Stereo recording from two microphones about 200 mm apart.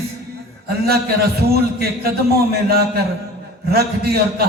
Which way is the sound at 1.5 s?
50° right (ahead or behind).